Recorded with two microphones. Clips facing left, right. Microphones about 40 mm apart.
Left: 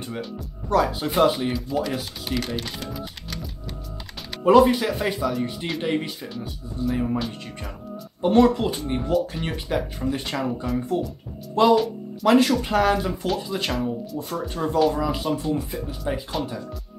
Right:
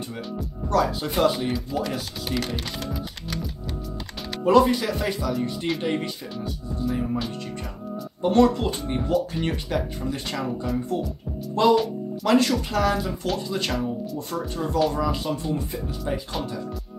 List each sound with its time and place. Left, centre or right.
0.7 s speech: centre
1.5 s speech: centre
4.5 s speech: centre
11.5 s music: centre
12.3 s speech: centre
12.6 s speech: left
13.3 s speech: centre
14.5 s speech: left
14.8 s speech: centre